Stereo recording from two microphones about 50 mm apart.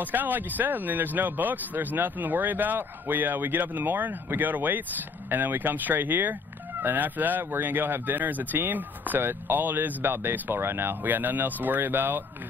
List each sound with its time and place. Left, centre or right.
0.0 s speech: right